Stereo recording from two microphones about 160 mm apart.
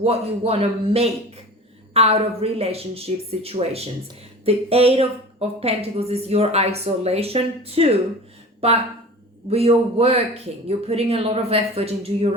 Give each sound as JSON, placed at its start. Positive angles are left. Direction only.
{"t": 0.0, "sound": "a woman's voice", "side_deg": -40}
{"t": 9.5, "sound": "a woman's voice", "side_deg": -40}